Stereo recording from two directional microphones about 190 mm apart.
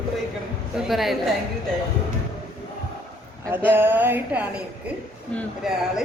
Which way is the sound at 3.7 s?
10° right (ahead or behind).